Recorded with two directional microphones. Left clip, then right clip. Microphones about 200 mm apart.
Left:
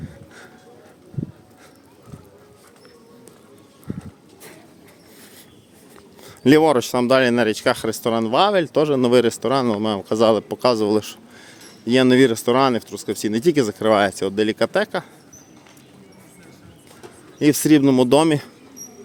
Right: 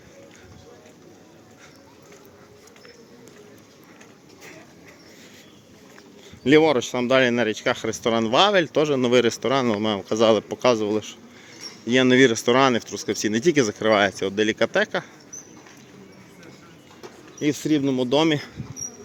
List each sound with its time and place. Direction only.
6.2 s speech: 40° left (ahead or behind)
11.9 s speech: 20° left (ahead or behind)
17.4 s speech: 45° left (ahead or behind)